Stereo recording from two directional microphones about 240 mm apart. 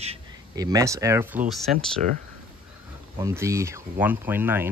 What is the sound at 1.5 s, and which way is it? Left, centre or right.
Speech, centre.